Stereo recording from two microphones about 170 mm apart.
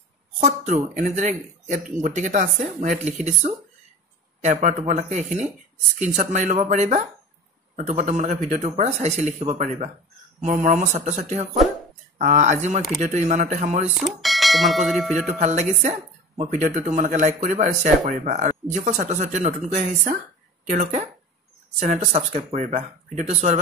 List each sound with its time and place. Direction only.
0.4 s speech: 45° right (ahead or behind)
4.4 s speech: 45° right (ahead or behind)
14.2 s speech: centre (ahead or behind)
15.1 s speech: 45° right (ahead or behind)